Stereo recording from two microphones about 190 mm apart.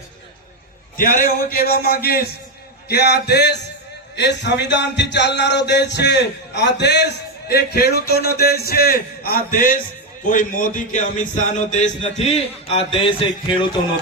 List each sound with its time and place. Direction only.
0.9 s a man's voice: 45° left (ahead or behind)
2.9 s music: 60° left (ahead or behind)
10.2 s speech: 45° left (ahead or behind)